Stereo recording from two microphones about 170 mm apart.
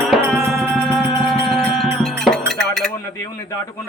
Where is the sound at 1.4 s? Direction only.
Centre (ahead or behind).